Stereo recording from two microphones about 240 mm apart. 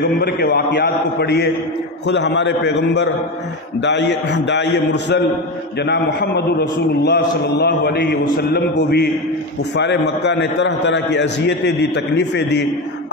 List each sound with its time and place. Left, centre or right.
0.0 s a man's voice: left